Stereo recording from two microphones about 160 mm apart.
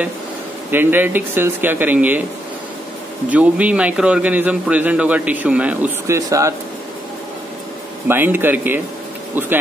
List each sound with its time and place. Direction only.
0.7 s a man's voice: 10° right (ahead or behind)
3.3 s a man's voice: 10° right (ahead or behind)
6.1 s speech: 20° right (ahead or behind)
8.1 s a man's voice: 15° right (ahead or behind)